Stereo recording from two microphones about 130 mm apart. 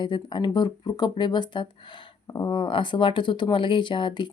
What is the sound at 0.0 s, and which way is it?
Speech, 35° left (ahead or behind).